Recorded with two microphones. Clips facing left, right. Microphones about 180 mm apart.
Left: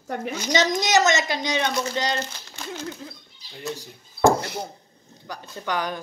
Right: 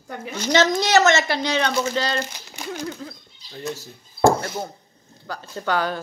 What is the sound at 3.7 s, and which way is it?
Speech, 15° left (ahead or behind).